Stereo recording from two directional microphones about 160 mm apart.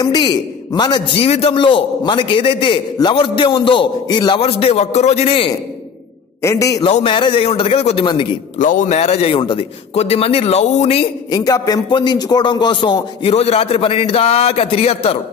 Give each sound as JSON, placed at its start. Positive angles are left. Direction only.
{"t": 0.0, "sound": "a man's voice", "side_deg": 25}
{"t": 6.4, "sound": "a man's voice", "side_deg": 20}
{"t": 6.9, "sound": "a man's voice", "side_deg": 35}
{"t": 8.5, "sound": "a man's voice", "side_deg": 55}